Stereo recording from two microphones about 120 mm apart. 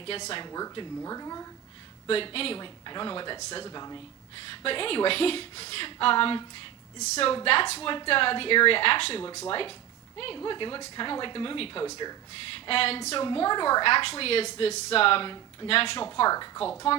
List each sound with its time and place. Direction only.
0.4 s speech: 30° left (ahead or behind)
2.0 s speech: 50° left (ahead or behind)
2.6 s speech: 40° left (ahead or behind)
4.6 s speech: 50° left (ahead or behind)
7.0 s a woman's voice: 70° left (ahead or behind)
7.4 s speech: 50° left (ahead or behind)
9.2 s speech: 30° left (ahead or behind)
9.5 s speech: 45° left (ahead or behind)
11.8 s speech: 35° left (ahead or behind)
12.5 s speech: 50° left (ahead or behind)
13.2 s speech: 40° left (ahead or behind)
13.8 s speech: 55° left (ahead or behind)